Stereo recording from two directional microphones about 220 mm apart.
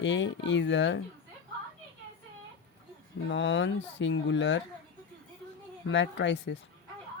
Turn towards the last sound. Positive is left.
turn(degrees=55)  # may be behind; listen again after turning